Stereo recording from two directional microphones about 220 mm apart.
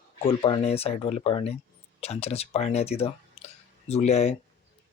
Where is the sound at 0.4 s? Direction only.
25° left (ahead or behind).